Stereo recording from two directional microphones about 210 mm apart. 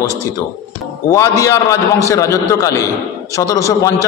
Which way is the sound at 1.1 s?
15° left (ahead or behind).